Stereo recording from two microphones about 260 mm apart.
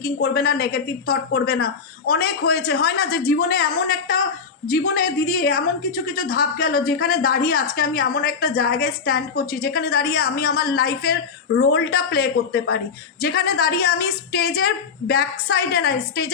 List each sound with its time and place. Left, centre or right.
0.0 s a woman's voice: left